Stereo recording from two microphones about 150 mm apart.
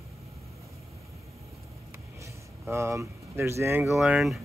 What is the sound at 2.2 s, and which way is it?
Speech, 20° right (ahead or behind).